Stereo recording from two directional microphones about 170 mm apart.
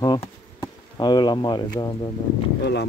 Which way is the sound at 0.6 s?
25° left (ahead or behind).